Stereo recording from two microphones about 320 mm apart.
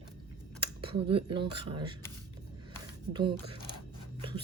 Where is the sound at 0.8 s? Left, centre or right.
Centre.